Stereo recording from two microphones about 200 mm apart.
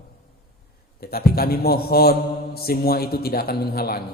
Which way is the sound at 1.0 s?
50° left (ahead or behind).